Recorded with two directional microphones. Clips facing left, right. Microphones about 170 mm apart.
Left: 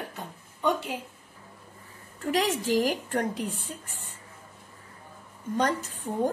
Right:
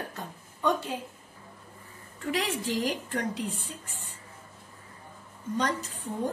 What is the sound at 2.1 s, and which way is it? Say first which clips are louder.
Speech: left 4 dB; 45° left (ahead or behind).